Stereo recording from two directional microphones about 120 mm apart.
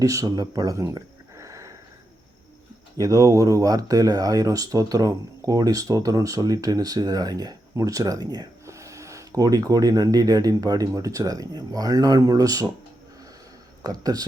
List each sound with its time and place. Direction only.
0.0 s speech: 30° right (ahead or behind)
3.0 s speech: 30° right (ahead or behind)
13.8 s speech: 30° right (ahead or behind)